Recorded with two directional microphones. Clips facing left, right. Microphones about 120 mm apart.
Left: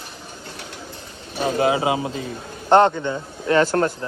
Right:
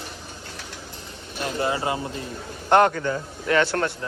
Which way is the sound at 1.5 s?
90° left.